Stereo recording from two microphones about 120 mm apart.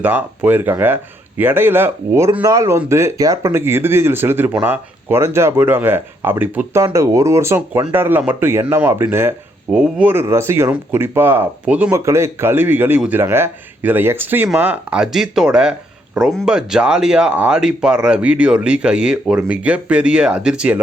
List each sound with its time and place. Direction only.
0.0 s speech: 15° right (ahead or behind)
11.9 s speech: 20° right (ahead or behind); by 20.7 s 5° right (ahead or behind)